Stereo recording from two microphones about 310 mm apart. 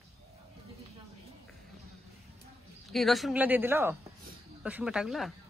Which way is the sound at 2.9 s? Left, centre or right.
Centre.